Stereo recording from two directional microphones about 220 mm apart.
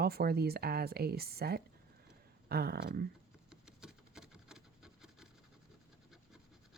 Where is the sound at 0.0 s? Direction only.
45° right (ahead or behind).